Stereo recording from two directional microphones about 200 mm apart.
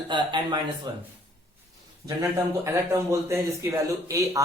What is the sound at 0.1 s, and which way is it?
Speech, 20° right (ahead or behind).